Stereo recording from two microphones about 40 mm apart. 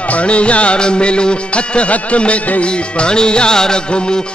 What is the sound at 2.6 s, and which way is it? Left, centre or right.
Music, left.